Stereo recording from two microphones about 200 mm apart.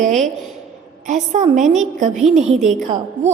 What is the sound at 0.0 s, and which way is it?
A woman's voice, 35° right (ahead or behind).